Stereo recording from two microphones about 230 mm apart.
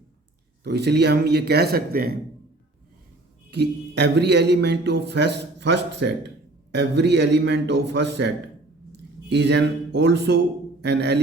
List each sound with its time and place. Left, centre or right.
0.6 s a man's voice: right
3.5 s a man's voice: right